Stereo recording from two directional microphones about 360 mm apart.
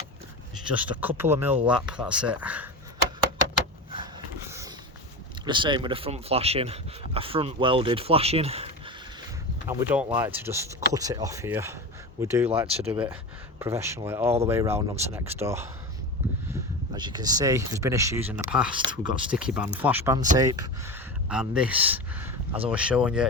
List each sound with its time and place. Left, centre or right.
0.7 s speech: centre
5.5 s speech: centre
9.6 s speech: centre
12.9 s speech: centre